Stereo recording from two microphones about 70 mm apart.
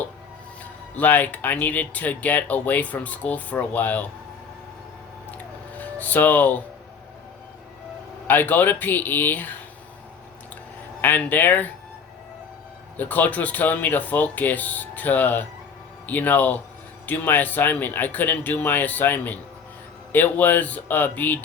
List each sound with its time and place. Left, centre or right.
0.6 s speech: left
5.7 s speech: left
8.3 s speech: left
11.0 s speech: left
13.0 s speech: left